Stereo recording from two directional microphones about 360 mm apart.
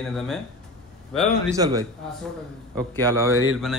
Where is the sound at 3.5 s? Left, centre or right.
Centre.